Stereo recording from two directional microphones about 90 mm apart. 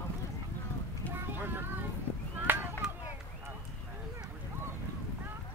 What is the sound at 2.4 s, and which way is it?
Chop, 25° right (ahead or behind).